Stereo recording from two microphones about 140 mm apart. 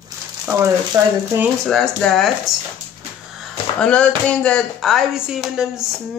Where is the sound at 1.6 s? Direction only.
5° left (ahead or behind).